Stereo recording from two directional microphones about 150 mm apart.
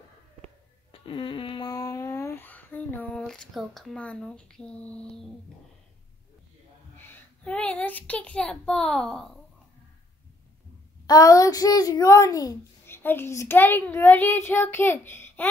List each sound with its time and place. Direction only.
0.9 s a sound: 35° left (ahead or behind); by 5.2 s 10° left (ahead or behind)
7.1 s speech: 10° left (ahead or behind)
11.1 s a child's voice: 25° left (ahead or behind)